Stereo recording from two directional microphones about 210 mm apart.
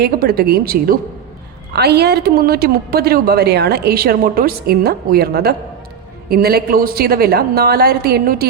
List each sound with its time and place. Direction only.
0.0 s speech: 45° right (ahead or behind)